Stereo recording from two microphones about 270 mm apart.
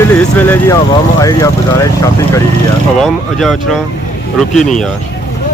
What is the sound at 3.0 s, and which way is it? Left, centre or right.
Speech, centre.